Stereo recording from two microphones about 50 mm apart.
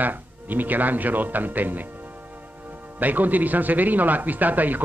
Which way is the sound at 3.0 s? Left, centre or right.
Right.